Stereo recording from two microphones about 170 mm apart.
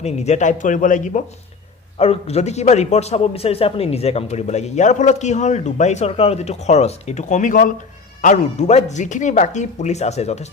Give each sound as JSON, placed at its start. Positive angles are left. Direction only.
{"t": 0.0, "sound": "speech", "side_deg": 40}
{"t": 2.0, "sound": "a man's voice", "side_deg": 40}